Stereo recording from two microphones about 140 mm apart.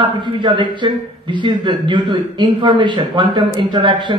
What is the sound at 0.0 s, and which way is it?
A man's voice, 35° right (ahead or behind).